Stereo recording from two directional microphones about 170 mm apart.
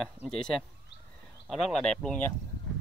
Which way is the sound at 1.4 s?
5° left (ahead or behind).